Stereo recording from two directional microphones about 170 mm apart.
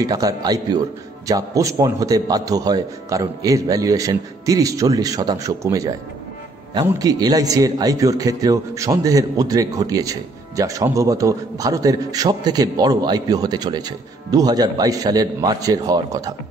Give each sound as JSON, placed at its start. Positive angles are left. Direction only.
{"t": 0.0, "sound": "a man's voice", "side_deg": -20}